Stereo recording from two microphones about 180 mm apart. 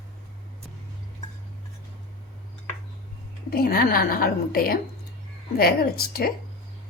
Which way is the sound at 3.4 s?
55° left (ahead or behind).